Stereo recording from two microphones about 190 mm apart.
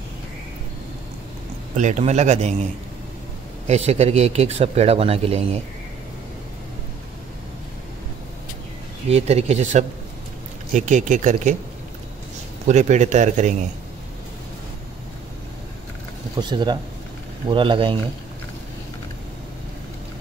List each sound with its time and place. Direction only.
1.8 s speech: 35° right (ahead or behind)
3.6 s speech: 35° right (ahead or behind)
9.1 s speech: 35° right (ahead or behind)
12.6 s speech: 40° right (ahead or behind)
16.3 s speech: 25° right (ahead or behind)